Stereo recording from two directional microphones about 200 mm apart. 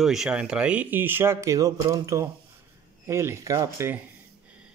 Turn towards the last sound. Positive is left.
turn(degrees=-15)  # may be behind; listen again after turning